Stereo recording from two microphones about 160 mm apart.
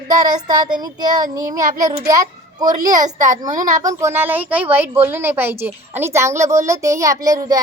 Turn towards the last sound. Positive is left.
turn(degrees=-20)  # may be behind; listen again after turning